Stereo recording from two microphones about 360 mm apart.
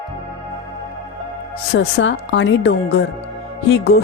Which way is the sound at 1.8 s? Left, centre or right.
Left.